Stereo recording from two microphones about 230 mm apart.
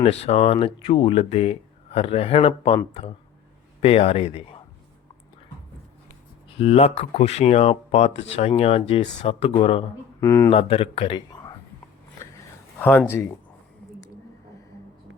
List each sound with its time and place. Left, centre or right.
0.0 s speech: left
6.5 s speech: left
10.2 s speech: centre
10.5 s speech: left
13.1 s speech: centre